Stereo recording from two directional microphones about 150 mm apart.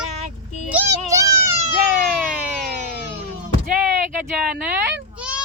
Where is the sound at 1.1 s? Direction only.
20° right (ahead or behind).